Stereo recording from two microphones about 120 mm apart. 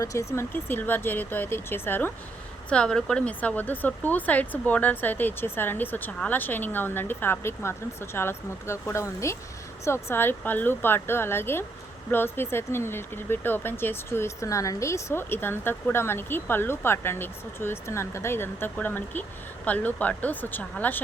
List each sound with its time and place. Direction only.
0.0 s speech: 25° left (ahead or behind)